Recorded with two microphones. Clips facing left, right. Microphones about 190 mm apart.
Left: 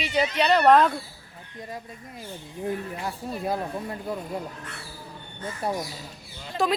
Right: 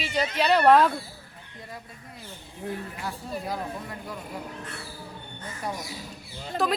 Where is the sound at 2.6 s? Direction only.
20° left (ahead or behind).